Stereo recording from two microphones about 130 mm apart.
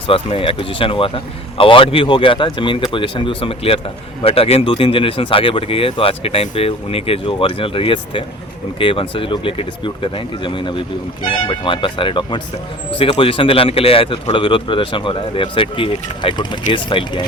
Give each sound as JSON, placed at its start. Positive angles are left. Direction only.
{"t": 0.1, "sound": "a man's voice", "side_deg": 45}